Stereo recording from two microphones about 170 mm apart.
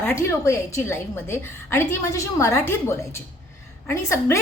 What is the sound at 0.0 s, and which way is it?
A woman's voice, 15° left (ahead or behind).